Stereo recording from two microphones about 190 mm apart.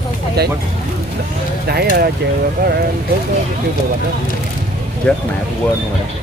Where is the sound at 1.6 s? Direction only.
55° right (ahead or behind).